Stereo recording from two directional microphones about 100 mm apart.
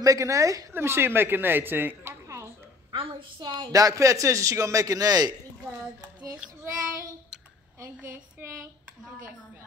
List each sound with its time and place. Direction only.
0.0 s a man's voice: 35° right (ahead or behind)
2.9 s a woman's voice: 55° right (ahead or behind)
3.7 s a man's voice: 35° right (ahead or behind)
7.8 s speech: 20° right (ahead or behind)